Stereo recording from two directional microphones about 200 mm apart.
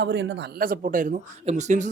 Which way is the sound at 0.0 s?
60° right (ahead or behind).